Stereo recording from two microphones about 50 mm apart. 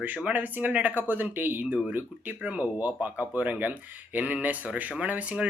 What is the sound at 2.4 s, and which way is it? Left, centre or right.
Speech, right.